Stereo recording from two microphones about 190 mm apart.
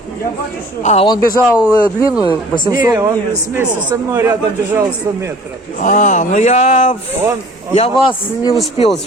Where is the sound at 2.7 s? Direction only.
20° right (ahead or behind).